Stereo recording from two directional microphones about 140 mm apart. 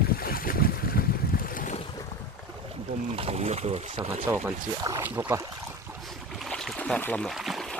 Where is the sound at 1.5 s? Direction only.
70° left (ahead or behind).